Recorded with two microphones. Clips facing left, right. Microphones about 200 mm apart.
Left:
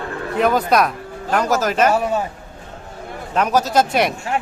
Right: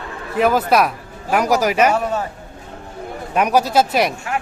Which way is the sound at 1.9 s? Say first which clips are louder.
Left 1 dB; 10° left (ahead or behind).